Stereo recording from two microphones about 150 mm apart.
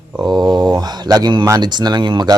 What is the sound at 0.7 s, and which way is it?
Speech, 25° right (ahead or behind).